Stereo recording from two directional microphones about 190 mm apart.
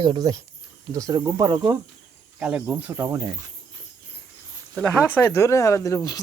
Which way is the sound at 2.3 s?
5° right (ahead or behind).